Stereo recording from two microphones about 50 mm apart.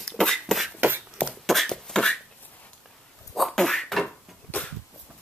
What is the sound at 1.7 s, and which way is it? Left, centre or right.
Beatboxing, centre.